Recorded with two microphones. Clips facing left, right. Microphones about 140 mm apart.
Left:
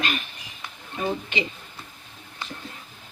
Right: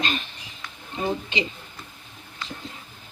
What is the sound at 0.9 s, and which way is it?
Speech, 20° right (ahead or behind).